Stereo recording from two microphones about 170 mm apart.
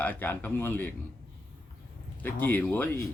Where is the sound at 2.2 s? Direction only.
10° left (ahead or behind).